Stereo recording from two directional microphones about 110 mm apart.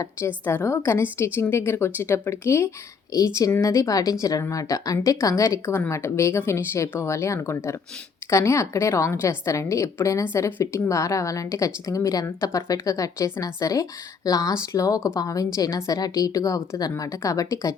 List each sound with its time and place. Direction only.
0.4 s a woman's voice: 25° left (ahead or behind)